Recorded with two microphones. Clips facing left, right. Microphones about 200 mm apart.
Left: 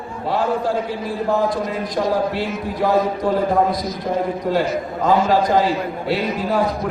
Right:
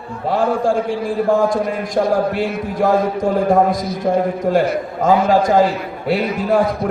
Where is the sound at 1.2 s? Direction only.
45° right (ahead or behind).